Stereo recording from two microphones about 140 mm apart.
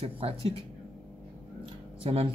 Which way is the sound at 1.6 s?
40° right (ahead or behind).